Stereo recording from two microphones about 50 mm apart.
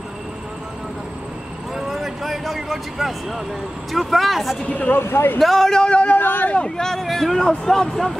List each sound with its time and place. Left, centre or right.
1.8 s vehicle: centre
3.9 s speech: centre
4.6 s speech: left
4.9 s speech: left
5.4 s speech: centre
5.9 s speech: left
6.1 s speech: left
6.5 s speech: centre
7.0 s speech: centre